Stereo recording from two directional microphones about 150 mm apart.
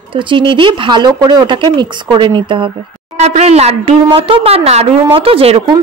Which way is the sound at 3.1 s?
50° right (ahead or behind).